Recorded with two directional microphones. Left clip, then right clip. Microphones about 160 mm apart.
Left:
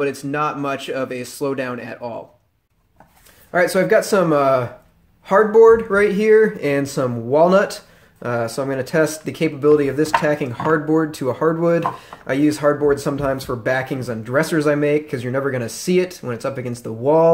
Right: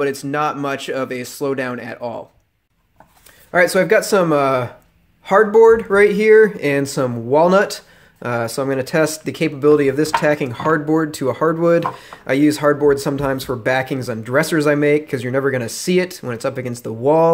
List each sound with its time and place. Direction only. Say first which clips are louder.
0.0 s speech: right 2 dB; 25° right (ahead or behind)
3.5 s speech: right 2 dB; 25° right (ahead or behind)